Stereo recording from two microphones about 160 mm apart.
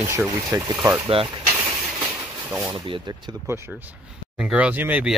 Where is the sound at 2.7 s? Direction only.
25° right (ahead or behind).